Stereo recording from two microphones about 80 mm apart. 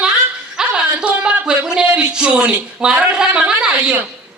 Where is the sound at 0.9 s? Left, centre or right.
Centre.